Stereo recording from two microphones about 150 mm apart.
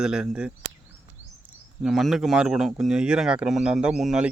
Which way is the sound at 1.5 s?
5° right (ahead or behind).